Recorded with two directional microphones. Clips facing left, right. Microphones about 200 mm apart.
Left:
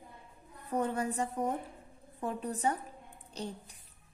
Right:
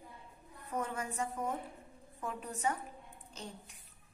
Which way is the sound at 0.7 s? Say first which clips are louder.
Left 6 dB; 35° left (ahead or behind).